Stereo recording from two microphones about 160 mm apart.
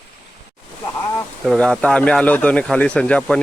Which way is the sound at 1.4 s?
Centre (ahead or behind).